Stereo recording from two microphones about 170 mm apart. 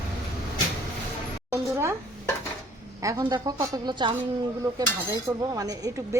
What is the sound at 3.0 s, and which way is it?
Cutlery, 20° right (ahead or behind).